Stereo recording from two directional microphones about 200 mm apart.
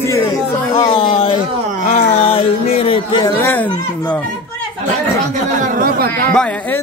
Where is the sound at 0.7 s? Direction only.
25° left (ahead or behind).